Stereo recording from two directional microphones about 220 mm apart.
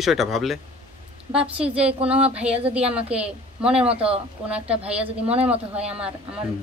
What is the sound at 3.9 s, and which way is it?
Speech, 25° right (ahead or behind).